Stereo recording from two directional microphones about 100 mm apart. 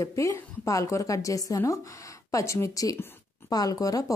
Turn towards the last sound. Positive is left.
turn(degrees=35)  # may be behind; listen again after turning